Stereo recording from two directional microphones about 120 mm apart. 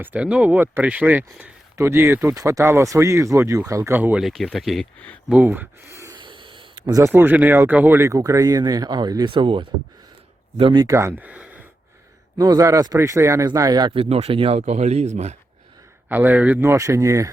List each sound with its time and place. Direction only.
0.0 s speech: 10° right (ahead or behind)
4.2 s speech: centre (ahead or behind)
5.3 s speech: 15° right (ahead or behind)
6.1 s gasp: 40° right (ahead or behind)
6.8 s speech: 30° right (ahead or behind)
7.1 s speech: 15° right (ahead or behind); by 10.8 s 45° right (ahead or behind)
10.8 s speech: 25° right (ahead or behind)
11.2 s speech: 10° right (ahead or behind)
12.4 s speech: 30° right (ahead or behind)
13.5 s speech: 35° right (ahead or behind); by 14.6 s 50° right (ahead or behind)
14.6 s speech: 70° right (ahead or behind)
16.0 s speech: 15° right (ahead or behind)